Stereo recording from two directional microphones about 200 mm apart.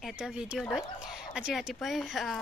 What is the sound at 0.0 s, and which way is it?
Speech, 5° right (ahead or behind).